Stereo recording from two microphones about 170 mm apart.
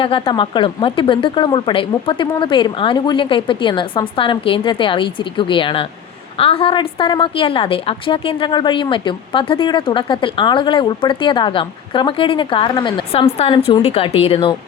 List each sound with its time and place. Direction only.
0.0 s a woman's voice: 30° left (ahead or behind)